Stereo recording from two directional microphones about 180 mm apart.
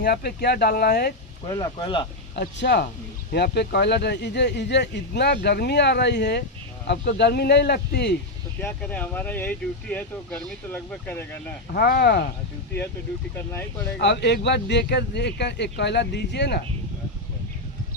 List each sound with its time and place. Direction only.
0.0 s speech: 60° left (ahead or behind)
1.5 s speech: 25° left (ahead or behind)
2.6 s speech: 70° left (ahead or behind)
8.6 s speech: 10° left (ahead or behind)
11.7 s speech: 60° left (ahead or behind)
13.3 s speech: 15° left (ahead or behind)
14.0 s speech: 70° left (ahead or behind)